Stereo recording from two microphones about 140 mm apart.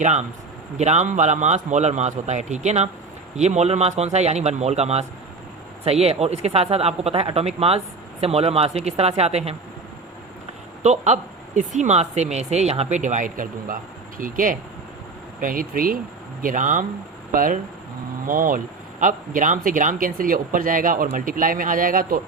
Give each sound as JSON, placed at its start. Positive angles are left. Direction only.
{"t": 0.0, "sound": "speech", "side_deg": -55}
{"t": 10.8, "sound": "speech", "side_deg": -55}
{"t": 16.4, "sound": "speech", "side_deg": -70}
{"t": 17.3, "sound": "speech", "side_deg": -80}